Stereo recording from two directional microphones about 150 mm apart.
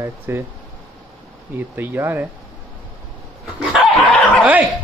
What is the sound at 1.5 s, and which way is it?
Speech, 10° right (ahead or behind).